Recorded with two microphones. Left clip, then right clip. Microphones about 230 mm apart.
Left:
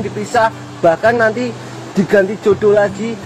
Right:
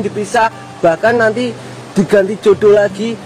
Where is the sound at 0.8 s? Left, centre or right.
Right.